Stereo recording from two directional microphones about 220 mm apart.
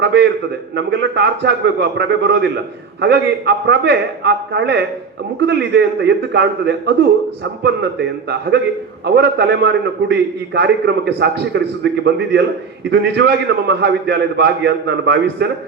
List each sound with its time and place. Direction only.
0.0 s a man's voice: 50° right (ahead or behind)